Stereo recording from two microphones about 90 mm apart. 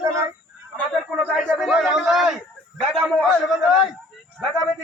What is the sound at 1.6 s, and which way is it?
Speech, centre (ahead or behind).